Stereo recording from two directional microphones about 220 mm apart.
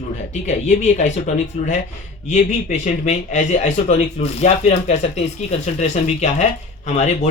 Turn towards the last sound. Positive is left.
turn(degrees=30)  # may be behind; listen again after turning